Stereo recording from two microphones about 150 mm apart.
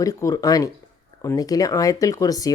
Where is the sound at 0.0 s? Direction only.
20° left (ahead or behind).